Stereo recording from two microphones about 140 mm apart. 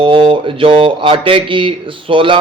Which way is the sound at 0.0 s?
40° right (ahead or behind).